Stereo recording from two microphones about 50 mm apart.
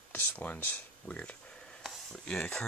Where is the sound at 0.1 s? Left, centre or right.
Left.